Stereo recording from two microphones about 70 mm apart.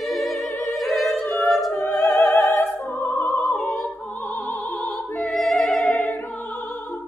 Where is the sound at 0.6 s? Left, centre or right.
Centre.